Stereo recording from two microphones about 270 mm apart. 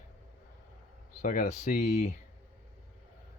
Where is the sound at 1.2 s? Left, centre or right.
Left.